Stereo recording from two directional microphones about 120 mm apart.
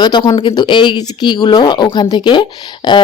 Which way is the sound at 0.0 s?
40° left (ahead or behind).